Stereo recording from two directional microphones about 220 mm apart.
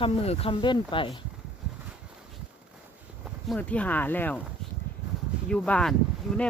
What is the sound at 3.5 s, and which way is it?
Speech, 5° left (ahead or behind).